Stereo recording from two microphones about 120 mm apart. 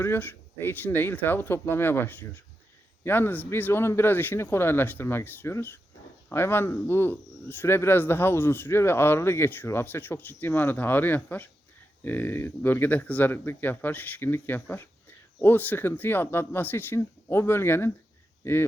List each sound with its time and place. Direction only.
0.0 s speech: 15° left (ahead or behind)